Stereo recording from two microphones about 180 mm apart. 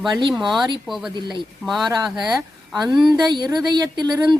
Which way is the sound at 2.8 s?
20° right (ahead or behind).